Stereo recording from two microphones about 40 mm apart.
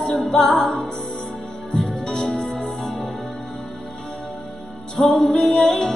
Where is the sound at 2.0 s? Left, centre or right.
Centre.